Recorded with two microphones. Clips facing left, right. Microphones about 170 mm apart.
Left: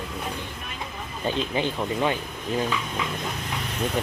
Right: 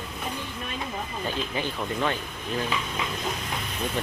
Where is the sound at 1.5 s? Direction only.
15° left (ahead or behind).